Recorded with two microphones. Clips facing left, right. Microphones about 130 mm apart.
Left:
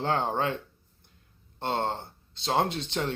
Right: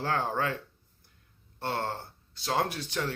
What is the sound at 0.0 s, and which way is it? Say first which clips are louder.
Speech: left 2 dB; 20° left (ahead or behind).